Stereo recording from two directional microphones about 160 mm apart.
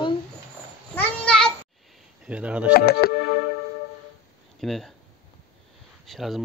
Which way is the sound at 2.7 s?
70° left (ahead or behind).